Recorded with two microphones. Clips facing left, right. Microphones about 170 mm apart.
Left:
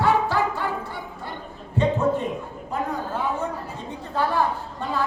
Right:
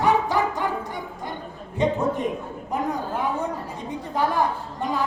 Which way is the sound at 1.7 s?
15° right (ahead or behind).